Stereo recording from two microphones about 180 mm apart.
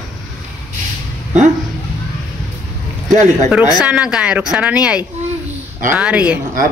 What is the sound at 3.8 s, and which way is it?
Speech, 5° right (ahead or behind).